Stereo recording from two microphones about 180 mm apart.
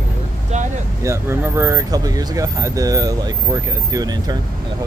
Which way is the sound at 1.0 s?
15° right (ahead or behind).